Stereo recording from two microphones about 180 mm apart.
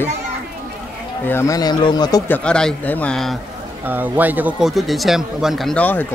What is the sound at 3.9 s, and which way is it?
Speech, 10° right (ahead or behind).